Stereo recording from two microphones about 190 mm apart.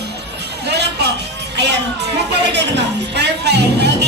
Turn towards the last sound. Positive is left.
turn(degrees=-60)  # may be behind; listen again after turning